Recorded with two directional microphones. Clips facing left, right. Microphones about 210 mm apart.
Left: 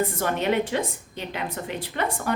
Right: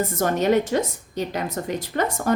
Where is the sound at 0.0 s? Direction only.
40° right (ahead or behind).